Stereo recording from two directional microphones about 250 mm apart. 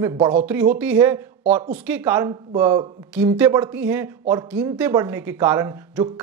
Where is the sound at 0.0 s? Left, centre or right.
Right.